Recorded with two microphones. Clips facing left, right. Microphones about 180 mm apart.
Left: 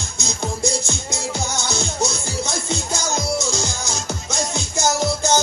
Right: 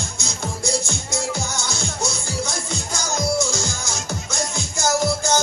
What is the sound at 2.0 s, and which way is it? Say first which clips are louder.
Music: even; 25° left (ahead or behind).